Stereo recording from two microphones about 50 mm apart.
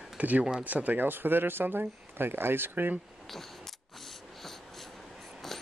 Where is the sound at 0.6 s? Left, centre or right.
Right.